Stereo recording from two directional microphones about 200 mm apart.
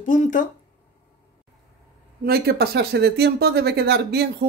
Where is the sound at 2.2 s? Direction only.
50° right (ahead or behind).